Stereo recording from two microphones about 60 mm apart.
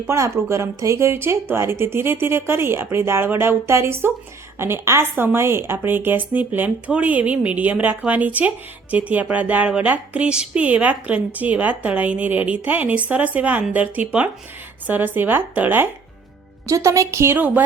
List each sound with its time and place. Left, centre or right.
0.1 s a woman's voice: right
16.6 s speech: right
17.3 s a woman's voice: right